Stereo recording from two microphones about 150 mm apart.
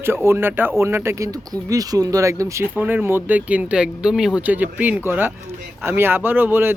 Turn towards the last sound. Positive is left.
turn(degrees=-15)  # may be behind; listen again after turning